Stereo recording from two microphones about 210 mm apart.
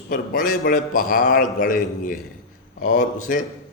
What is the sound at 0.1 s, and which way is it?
A man's voice, 40° left (ahead or behind).